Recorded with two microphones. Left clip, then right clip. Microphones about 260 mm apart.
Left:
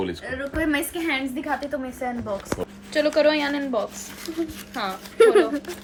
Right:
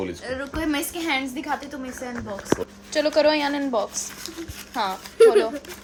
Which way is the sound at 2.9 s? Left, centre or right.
Centre.